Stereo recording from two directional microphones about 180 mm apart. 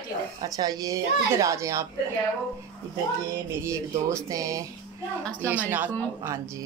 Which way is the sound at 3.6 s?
15° right (ahead or behind).